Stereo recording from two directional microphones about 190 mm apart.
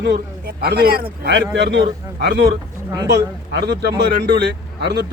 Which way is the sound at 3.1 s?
60° right (ahead or behind).